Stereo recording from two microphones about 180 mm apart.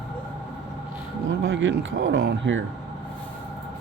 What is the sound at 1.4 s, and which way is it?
Speech, 85° right.